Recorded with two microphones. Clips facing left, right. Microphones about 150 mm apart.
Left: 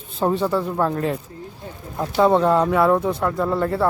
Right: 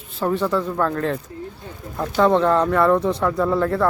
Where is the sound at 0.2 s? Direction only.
20° left (ahead or behind).